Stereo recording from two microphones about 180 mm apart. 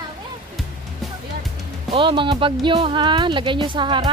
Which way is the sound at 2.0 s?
30° right (ahead or behind).